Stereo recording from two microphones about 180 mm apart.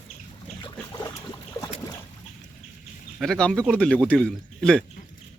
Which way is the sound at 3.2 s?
5° left (ahead or behind).